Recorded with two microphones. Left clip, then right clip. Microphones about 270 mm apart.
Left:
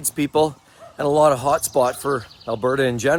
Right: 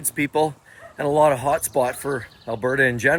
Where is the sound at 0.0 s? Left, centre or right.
Centre.